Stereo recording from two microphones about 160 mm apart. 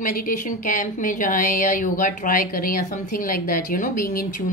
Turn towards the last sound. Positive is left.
turn(degrees=65)  # may be behind; listen again after turning